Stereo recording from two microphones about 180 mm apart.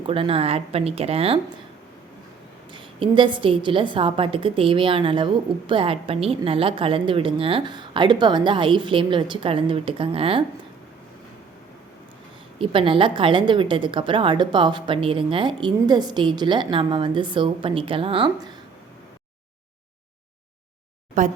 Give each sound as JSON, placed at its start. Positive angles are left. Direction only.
{"t": 0.1, "sound": "speech", "side_deg": -30}
{"t": 2.7, "sound": "a woman's voice", "side_deg": -25}
{"t": 12.5, "sound": "a woman's voice", "side_deg": -30}
{"t": 21.2, "sound": "speech", "side_deg": -45}